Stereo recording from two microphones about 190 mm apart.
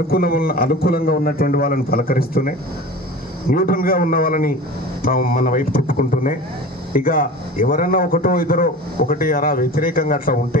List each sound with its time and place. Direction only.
0.1 s a man's voice: 50° left (ahead or behind)